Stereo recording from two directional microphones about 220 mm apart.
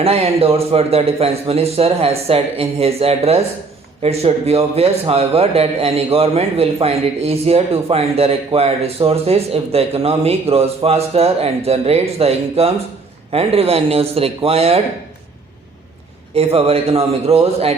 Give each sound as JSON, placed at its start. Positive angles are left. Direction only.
{"t": 0.0, "sound": "a man's voice", "side_deg": -25}
{"t": 16.3, "sound": "a man's voice", "side_deg": -25}